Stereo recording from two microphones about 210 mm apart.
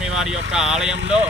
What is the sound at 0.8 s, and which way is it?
Speech, 30° right (ahead or behind).